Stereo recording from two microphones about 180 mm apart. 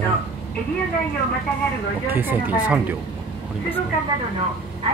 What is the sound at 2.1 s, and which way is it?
Speech, 10° right (ahead or behind).